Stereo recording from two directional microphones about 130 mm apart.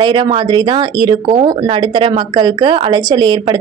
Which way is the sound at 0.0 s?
40° right (ahead or behind).